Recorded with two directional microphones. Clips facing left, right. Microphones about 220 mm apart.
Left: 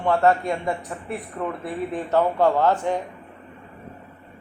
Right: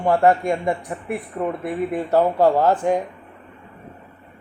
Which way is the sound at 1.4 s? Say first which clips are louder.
Right 4 dB; 25° right (ahead or behind).